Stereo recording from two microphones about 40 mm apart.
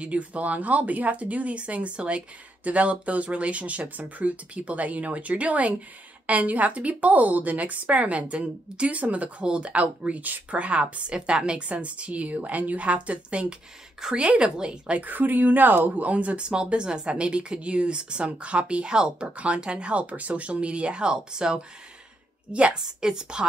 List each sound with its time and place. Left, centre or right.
0.0 s a woman's voice: right
9.4 s a woman's voice: right
15.0 s a woman's voice: right
16.1 s speech: right
18.9 s a woman's voice: centre
19.2 s speech: right
22.8 s a woman's voice: centre